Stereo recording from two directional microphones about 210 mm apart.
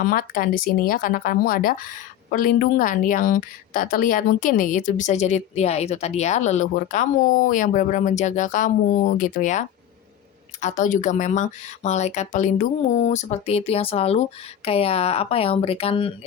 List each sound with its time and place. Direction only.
0.0 s a woman's voice: 45° left (ahead or behind); by 16.1 s 25° left (ahead or behind)